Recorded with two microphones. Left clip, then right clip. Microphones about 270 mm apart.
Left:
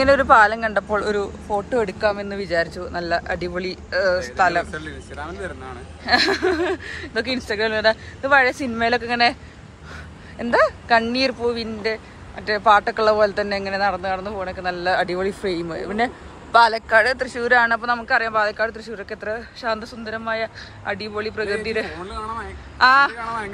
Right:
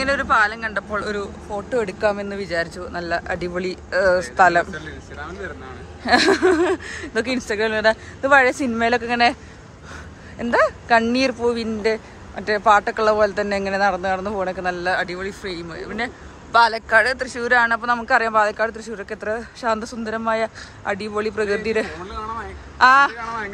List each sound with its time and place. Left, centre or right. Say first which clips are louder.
0.0 s speech: left 4 dB; centre
4.8 s speech: left 1 dB; centre
6.0 s speech: right 3 dB; centre
10.4 s speech: even; centre
21.9 s speech: even; centre
23.1 s speech: even; centre